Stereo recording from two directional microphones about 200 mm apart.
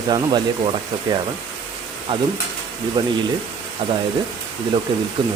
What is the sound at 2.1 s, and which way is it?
Speech, 30° right (ahead or behind).